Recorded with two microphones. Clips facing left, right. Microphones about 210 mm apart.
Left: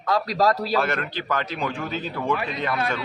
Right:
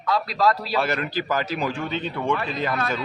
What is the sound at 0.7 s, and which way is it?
A man's voice, 5° right (ahead or behind).